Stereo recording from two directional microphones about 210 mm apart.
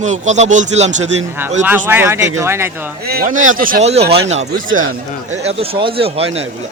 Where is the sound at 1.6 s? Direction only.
10° right (ahead or behind).